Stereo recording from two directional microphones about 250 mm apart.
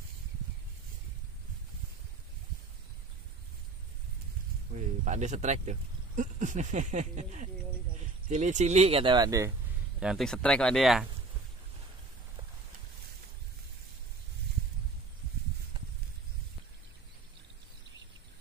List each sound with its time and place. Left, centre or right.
4.7 s speech: right
9.9 s speech: centre